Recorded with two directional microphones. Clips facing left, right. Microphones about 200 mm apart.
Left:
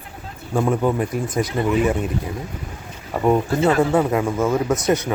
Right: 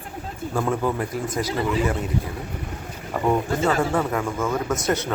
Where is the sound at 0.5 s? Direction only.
15° left (ahead or behind).